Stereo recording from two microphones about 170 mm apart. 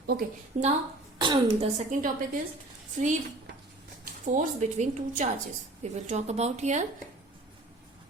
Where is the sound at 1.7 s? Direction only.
50° right (ahead or behind).